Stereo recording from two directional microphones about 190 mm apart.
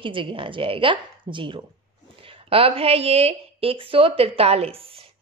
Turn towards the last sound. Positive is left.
turn(degrees=-30)  # may be behind; listen again after turning